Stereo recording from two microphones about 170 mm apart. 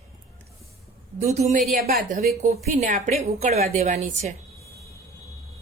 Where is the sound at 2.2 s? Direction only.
45° right (ahead or behind).